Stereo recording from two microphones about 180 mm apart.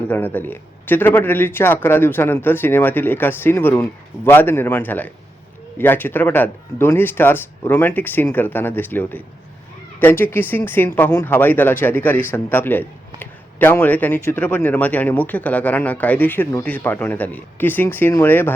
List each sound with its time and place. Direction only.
0.1 s speech: 10° left (ahead or behind)